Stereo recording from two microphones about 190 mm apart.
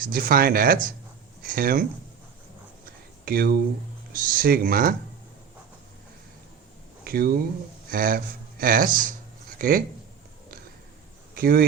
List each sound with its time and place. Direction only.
0.0 s speech: 50° right (ahead or behind)
3.2 s speech: 55° right (ahead or behind)
7.0 s speech: 50° right (ahead or behind)
11.3 s speech: 50° right (ahead or behind)